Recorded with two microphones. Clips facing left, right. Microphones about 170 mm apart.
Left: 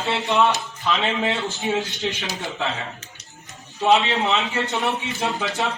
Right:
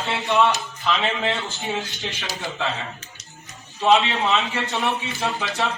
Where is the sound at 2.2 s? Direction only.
20° left (ahead or behind).